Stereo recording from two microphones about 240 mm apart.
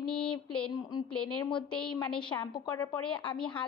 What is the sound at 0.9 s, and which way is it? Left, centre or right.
Speech, centre.